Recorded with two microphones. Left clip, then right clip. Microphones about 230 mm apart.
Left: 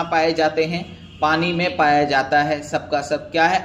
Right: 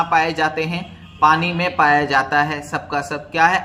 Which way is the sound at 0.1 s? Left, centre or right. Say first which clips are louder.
Right 1 dB; right.